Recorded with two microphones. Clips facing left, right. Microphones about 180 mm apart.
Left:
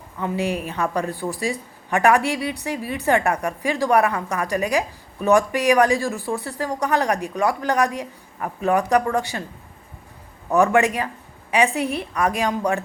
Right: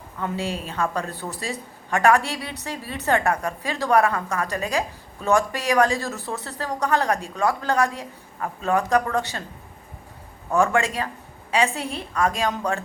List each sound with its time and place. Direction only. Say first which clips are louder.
0.2 s a woman's voice: left 4 dB; 15° left (ahead or behind)
10.5 s a woman's voice: left 4 dB; 20° left (ahead or behind)